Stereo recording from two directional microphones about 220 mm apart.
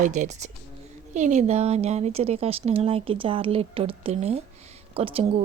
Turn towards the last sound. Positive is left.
turn(degrees=-25)  # may be behind; listen again after turning